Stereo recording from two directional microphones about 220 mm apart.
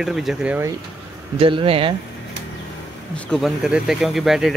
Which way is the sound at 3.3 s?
Centre (ahead or behind).